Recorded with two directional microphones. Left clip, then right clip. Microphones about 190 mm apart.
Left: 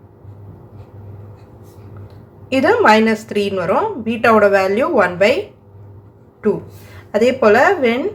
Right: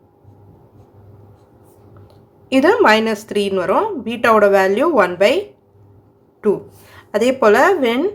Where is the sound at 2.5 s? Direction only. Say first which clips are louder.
Even; 25° right (ahead or behind).